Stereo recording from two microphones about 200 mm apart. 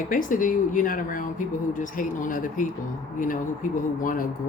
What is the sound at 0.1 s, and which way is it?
A woman's voice, 40° left (ahead or behind).